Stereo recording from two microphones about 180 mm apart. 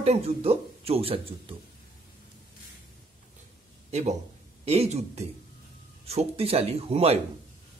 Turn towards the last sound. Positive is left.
turn(degrees=-35)  # may be behind; listen again after turning